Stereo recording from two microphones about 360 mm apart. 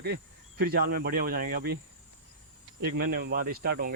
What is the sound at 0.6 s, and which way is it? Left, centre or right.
Speech, right.